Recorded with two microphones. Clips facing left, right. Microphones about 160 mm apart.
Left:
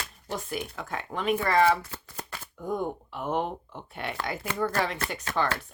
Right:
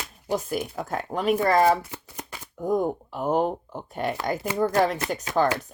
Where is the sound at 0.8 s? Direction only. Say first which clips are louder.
Right 5 dB; 40° right (ahead or behind).